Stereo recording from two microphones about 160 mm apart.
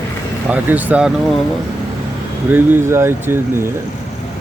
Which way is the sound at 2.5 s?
15° right (ahead or behind).